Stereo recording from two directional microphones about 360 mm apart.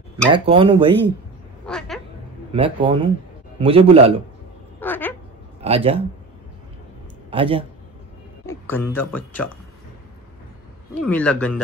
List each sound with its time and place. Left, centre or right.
0.3 s speech: centre
1.7 s cat: centre
2.5 s speech: centre
4.7 s a sound: centre
5.6 s a man's voice: centre
7.2 s speech: centre
8.5 s music: centre
11.0 s a man's voice: centre